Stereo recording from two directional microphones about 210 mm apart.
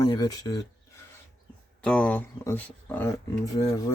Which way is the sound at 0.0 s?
20° left (ahead or behind).